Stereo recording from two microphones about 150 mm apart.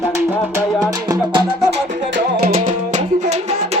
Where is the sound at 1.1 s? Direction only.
30° right (ahead or behind).